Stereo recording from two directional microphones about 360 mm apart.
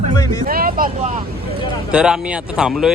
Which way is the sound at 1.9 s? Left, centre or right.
Centre.